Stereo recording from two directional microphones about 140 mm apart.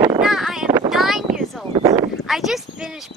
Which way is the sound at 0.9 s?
Centre (ahead or behind).